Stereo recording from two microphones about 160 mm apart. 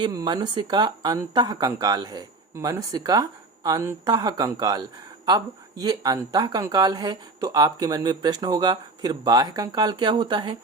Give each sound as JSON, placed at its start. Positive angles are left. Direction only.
{"t": 0.0, "sound": "speech", "side_deg": -25}